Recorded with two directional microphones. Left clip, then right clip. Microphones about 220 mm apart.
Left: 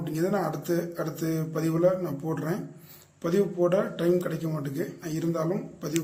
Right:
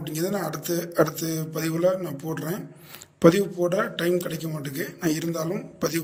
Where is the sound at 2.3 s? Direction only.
10° right (ahead or behind).